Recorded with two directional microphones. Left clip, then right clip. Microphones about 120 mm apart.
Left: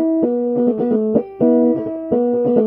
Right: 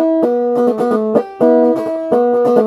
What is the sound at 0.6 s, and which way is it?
Music, 30° left (ahead or behind).